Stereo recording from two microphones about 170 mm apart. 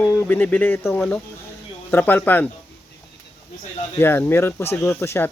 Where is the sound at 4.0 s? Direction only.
10° left (ahead or behind).